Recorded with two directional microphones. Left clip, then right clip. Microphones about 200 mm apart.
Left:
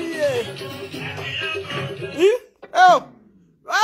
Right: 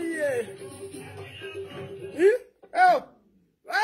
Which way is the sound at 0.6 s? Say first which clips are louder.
Left 9 dB; 40° left (ahead or behind).